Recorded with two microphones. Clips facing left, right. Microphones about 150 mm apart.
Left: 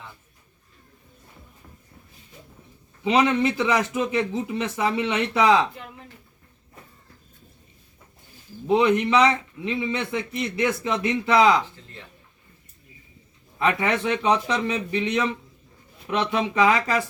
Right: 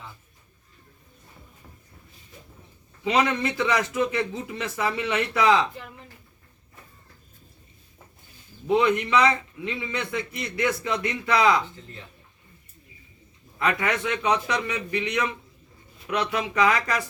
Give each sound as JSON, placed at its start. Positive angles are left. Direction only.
{"t": 3.0, "sound": "a man's voice", "side_deg": 20}
{"t": 8.6, "sound": "a man's voice", "side_deg": 20}
{"t": 13.6, "sound": "a man's voice", "side_deg": 25}